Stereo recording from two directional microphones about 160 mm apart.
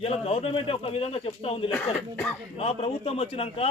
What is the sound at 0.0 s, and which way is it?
Speech, 40° left (ahead or behind).